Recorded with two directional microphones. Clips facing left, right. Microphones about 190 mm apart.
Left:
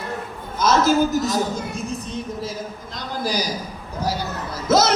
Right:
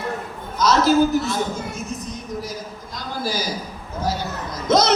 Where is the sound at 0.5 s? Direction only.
50° left (ahead or behind).